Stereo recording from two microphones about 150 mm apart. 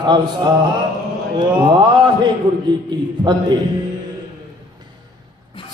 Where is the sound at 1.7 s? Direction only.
30° right (ahead or behind).